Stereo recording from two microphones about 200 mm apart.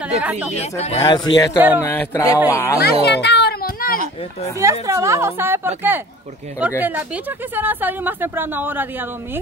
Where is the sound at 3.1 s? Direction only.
60° left (ahead or behind).